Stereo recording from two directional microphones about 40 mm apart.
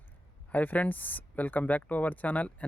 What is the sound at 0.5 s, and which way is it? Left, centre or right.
Speech, left.